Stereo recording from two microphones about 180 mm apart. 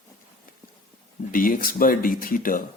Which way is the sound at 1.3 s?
50° left (ahead or behind).